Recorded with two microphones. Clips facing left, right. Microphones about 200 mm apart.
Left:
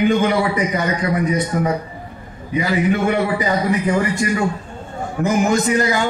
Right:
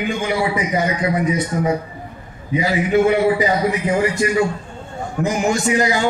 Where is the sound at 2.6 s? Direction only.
55° left (ahead or behind).